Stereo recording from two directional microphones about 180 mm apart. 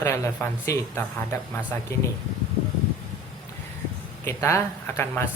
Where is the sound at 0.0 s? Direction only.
15° left (ahead or behind).